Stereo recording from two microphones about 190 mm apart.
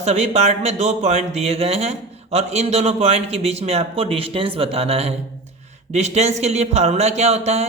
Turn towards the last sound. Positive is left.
turn(degrees=-35)  # may be behind; listen again after turning